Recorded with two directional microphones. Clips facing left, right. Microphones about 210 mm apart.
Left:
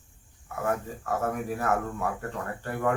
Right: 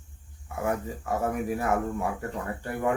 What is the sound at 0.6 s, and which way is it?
Speech, 10° right (ahead or behind).